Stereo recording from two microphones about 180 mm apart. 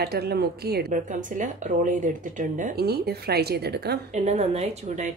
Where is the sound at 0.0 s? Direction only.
60° right (ahead or behind).